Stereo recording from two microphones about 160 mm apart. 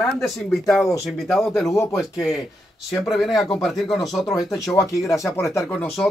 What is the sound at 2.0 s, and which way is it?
Speech, centre (ahead or behind).